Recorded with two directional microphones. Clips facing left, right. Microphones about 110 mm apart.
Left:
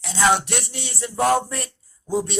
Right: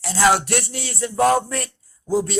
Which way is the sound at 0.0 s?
5° right (ahead or behind).